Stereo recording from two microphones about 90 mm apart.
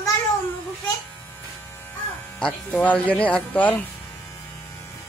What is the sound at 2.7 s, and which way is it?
Speech, 15° left (ahead or behind).